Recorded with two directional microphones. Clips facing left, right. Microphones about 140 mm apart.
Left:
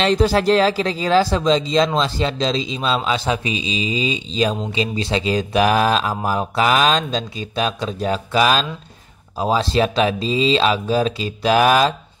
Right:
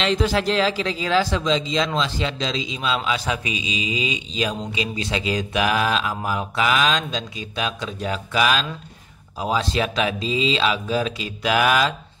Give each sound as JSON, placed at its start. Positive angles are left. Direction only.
{"t": 0.0, "sound": "speech", "side_deg": 35}